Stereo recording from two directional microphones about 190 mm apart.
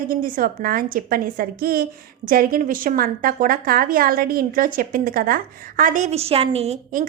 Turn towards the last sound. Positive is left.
turn(degrees=-35)  # may be behind; listen again after turning